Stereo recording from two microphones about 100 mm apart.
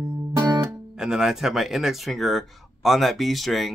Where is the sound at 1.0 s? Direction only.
5° right (ahead or behind).